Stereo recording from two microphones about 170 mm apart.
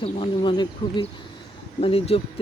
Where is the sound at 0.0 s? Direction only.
30° left (ahead or behind).